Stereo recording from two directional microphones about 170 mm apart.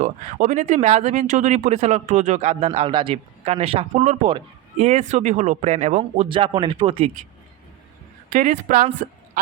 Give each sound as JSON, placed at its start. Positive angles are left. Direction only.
{"t": 0.0, "sound": "speech", "side_deg": -50}
{"t": 8.6, "sound": "speech", "side_deg": -50}